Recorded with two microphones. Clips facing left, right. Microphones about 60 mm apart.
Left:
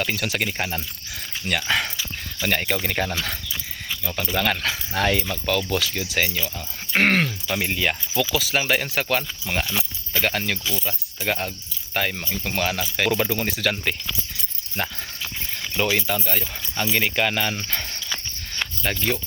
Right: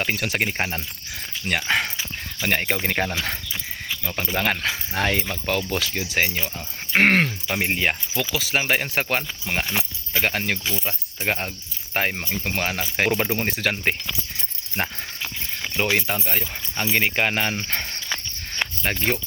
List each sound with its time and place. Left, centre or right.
0.0 s speech: right
5.1 s speech: right
8.1 s speech: centre
8.4 s speech: right
10.8 s speech: right
12.3 s speech: right
13.1 s speech: centre
15.8 s speech: centre; by 17.6 s right
17.7 s cricket: right
18.9 s speech: right